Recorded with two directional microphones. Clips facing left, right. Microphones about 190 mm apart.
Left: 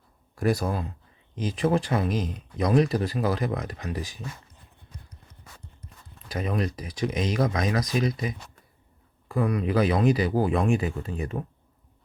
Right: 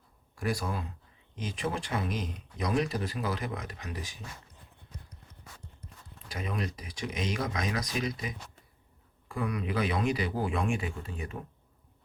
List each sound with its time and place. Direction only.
0.3 s speech: 40° left (ahead or behind)
6.3 s speech: 40° left (ahead or behind)
9.3 s speech: 35° left (ahead or behind)